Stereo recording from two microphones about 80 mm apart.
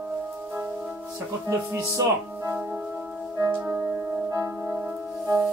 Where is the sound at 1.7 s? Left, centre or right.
Right.